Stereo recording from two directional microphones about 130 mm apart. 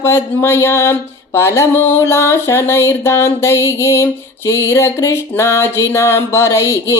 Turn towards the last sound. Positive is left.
turn(degrees=20)  # may be behind; listen again after turning